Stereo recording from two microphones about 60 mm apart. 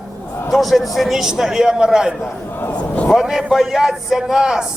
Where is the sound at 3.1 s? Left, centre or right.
Centre.